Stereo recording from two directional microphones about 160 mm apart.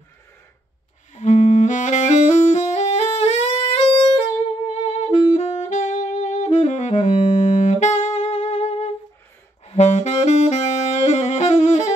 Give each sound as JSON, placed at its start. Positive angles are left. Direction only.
{"t": 1.1, "sound": "saxophone", "side_deg": 50}